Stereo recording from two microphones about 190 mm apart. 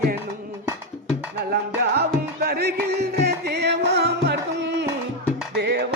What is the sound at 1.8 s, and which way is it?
Music, 55° right (ahead or behind).